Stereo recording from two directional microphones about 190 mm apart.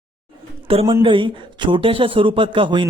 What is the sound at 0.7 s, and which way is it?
Speech, 30° right (ahead or behind).